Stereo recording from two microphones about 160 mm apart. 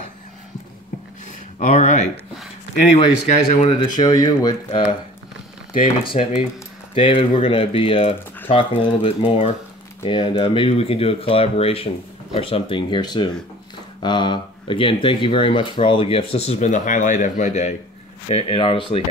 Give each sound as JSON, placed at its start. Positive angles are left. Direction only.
{"t": 1.6, "sound": "speech", "side_deg": 50}
{"t": 3.8, "sound": "speech", "side_deg": 25}
{"t": 6.0, "sound": "speech", "side_deg": 40}
{"t": 18.3, "sound": "speech", "side_deg": 35}